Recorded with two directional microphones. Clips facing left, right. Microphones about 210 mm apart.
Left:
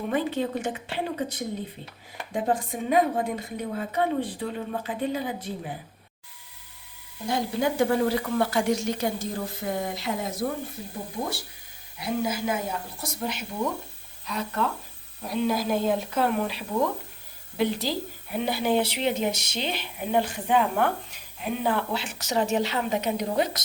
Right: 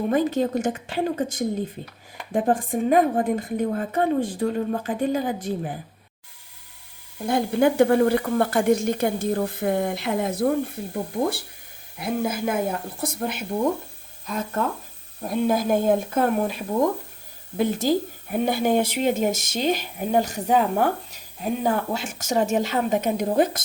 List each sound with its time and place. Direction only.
0.1 s speech: 45° right (ahead or behind)
7.3 s a woman's voice: 55° right (ahead or behind)
11.9 s speech: 55° right (ahead or behind)